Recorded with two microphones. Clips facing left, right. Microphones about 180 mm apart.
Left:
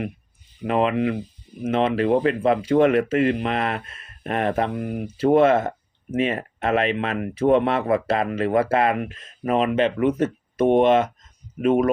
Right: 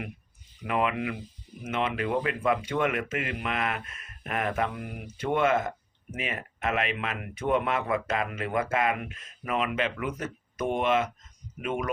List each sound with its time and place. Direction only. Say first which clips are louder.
0.6 s speech: left 7 dB; 30° left (ahead or behind)